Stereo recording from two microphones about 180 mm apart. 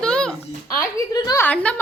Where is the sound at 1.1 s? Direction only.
20° left (ahead or behind).